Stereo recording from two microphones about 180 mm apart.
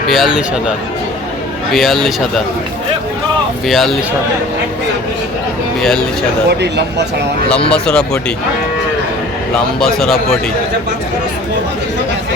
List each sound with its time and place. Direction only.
0.1 s speech: centre (ahead or behind)
1.7 s speech: centre (ahead or behind)
3.7 s speech: centre (ahead or behind)
5.8 s speech: 5° left (ahead or behind)
6.5 s speech: 70° right (ahead or behind)
7.7 s speech: 5° left (ahead or behind)
9.8 s speech: centre (ahead or behind)